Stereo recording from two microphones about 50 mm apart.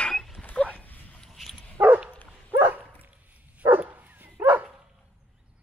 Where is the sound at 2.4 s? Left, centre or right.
Right.